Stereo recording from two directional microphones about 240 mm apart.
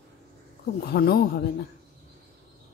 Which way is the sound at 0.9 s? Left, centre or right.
Left.